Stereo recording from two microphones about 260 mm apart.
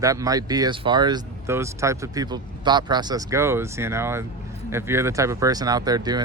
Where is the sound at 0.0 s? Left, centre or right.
Centre.